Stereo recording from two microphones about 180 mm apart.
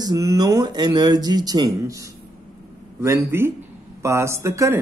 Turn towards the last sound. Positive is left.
turn(degrees=-15)  # may be behind; listen again after turning